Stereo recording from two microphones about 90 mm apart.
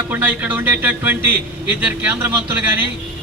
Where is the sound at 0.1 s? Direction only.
20° right (ahead or behind).